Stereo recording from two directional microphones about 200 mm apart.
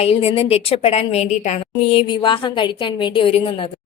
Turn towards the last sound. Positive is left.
turn(degrees=25)  # may be behind; listen again after turning